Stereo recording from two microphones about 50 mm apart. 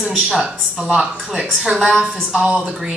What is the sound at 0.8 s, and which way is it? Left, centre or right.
A man's voice, centre.